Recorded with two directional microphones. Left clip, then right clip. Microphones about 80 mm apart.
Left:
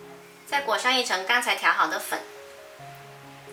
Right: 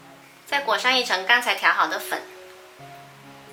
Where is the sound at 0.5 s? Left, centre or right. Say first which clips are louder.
Right 3 dB; centre.